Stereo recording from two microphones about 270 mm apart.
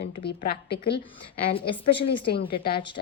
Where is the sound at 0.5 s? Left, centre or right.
Centre.